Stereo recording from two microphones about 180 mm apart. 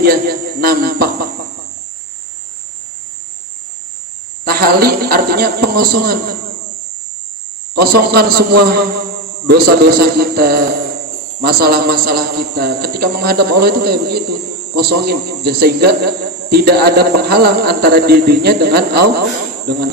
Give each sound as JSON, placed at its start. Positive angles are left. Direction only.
{"t": 0.0, "sound": "a man's voice", "side_deg": -55}
{"t": 4.4, "sound": "a man's voice", "side_deg": -55}
{"t": 7.8, "sound": "a man's voice", "side_deg": -60}